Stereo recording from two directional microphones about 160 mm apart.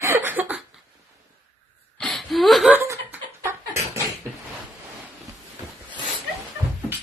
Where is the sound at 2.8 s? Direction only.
15° right (ahead or behind).